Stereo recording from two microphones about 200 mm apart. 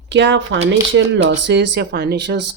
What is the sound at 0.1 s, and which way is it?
Speech, 65° right (ahead or behind).